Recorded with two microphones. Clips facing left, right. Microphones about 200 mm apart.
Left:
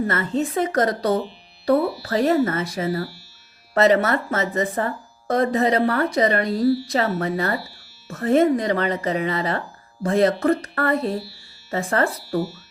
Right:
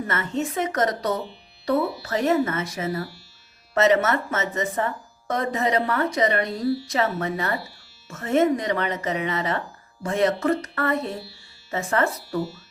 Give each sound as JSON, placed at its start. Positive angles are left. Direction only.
{"t": 0.0, "sound": "speech", "side_deg": 35}